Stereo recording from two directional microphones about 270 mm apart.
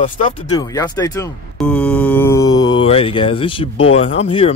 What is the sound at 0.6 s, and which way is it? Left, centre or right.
Speech, centre.